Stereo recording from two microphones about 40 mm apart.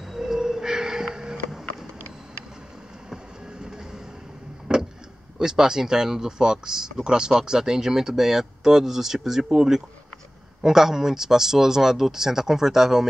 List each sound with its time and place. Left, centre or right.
0.1 s a sound: centre
3.6 s train: centre
4.7 s vehicle: centre
5.4 s speech: centre